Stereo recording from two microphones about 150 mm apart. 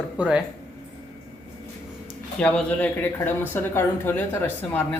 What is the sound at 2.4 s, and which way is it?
Speech, 10° left (ahead or behind).